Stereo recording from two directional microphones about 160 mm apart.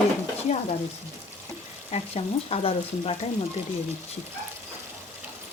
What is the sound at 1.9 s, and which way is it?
Speech, 40° left (ahead or behind).